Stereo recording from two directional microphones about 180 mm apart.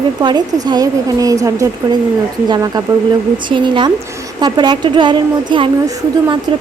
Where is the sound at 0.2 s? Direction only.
25° right (ahead or behind).